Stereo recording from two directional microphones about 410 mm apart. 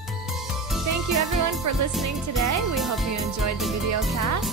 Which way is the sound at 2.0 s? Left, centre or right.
Right.